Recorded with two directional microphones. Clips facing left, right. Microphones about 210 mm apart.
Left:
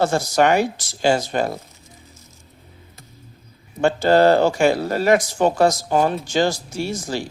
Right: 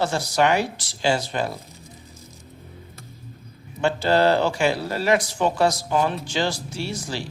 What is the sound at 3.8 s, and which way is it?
Speech, 45° left (ahead or behind).